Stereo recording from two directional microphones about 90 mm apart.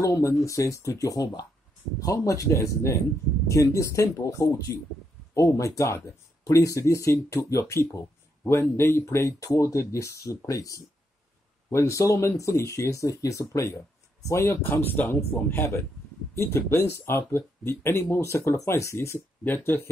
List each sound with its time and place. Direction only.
0.0 s speech: 35° left (ahead or behind)